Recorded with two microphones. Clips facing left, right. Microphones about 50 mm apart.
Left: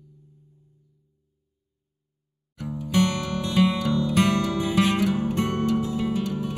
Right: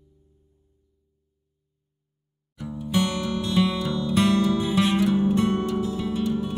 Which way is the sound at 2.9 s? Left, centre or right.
Left.